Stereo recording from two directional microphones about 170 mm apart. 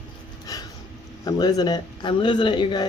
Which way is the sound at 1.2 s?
20° left (ahead or behind).